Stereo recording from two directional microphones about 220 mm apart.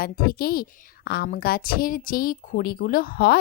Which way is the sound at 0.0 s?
40° left (ahead or behind).